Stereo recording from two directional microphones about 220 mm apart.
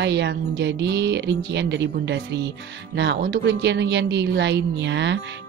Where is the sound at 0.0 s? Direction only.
50° right (ahead or behind).